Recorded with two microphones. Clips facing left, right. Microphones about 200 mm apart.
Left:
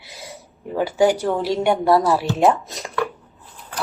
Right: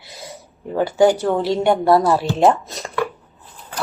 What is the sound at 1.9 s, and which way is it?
Speech, 15° right (ahead or behind).